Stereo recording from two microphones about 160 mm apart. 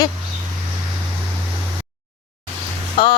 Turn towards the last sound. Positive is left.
turn(degrees=30)  # may be behind; listen again after turning